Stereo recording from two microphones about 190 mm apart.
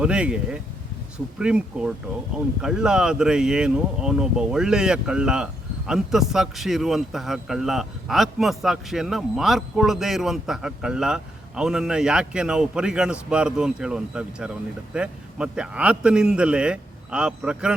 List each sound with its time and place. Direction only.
0.0 s speech: 5° right (ahead or behind)